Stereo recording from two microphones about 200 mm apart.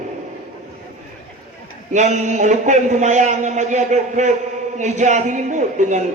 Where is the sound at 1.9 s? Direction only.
35° right (ahead or behind).